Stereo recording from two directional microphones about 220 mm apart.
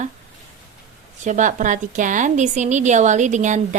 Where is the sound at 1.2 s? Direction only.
35° right (ahead or behind).